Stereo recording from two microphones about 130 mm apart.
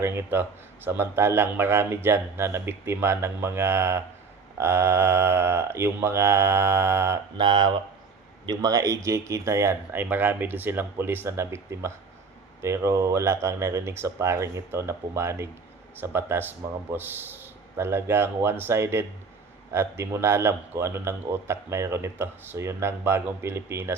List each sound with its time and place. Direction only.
0.0 s a man's voice: 20° right (ahead or behind)
7.3 s a man's voice: 35° right (ahead or behind); by 23.9 s 20° right (ahead or behind)